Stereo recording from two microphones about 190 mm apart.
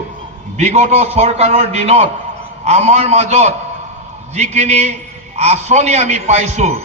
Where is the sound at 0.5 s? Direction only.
35° right (ahead or behind).